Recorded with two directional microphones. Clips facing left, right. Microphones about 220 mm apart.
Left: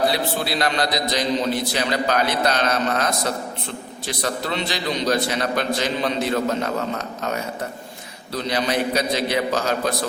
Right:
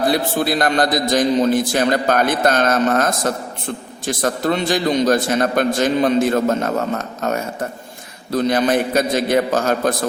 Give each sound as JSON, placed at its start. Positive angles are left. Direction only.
{"t": 0.1, "sound": "a man's voice", "side_deg": -50}